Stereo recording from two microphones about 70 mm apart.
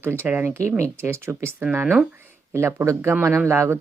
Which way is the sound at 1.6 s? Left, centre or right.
Right.